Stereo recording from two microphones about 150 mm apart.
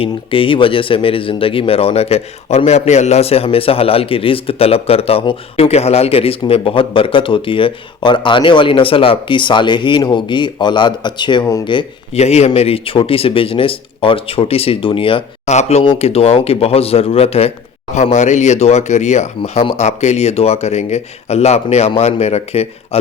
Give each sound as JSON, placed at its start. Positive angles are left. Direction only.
{"t": 0.0, "sound": "speech", "side_deg": 35}
{"t": 12.2, "sound": "speech", "side_deg": 45}